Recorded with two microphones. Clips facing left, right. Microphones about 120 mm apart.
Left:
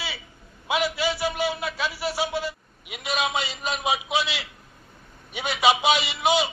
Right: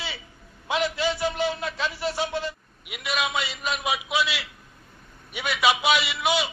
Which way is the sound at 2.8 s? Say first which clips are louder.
Left 1 dB; 30° left (ahead or behind).